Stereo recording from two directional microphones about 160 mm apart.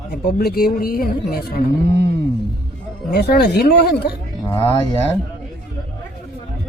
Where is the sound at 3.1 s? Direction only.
80° left.